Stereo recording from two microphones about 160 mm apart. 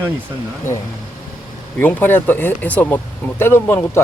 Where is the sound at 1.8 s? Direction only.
10° left (ahead or behind).